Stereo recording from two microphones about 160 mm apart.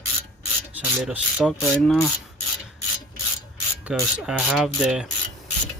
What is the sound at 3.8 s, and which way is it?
Rub, 10° right (ahead or behind).